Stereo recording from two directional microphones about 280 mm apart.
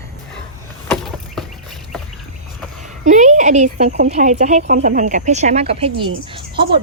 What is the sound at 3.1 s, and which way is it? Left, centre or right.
Speech, right.